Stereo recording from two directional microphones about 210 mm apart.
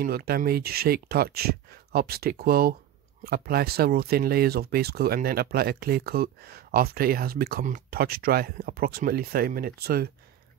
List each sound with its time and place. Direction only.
0.0 s speech: 50° right (ahead or behind)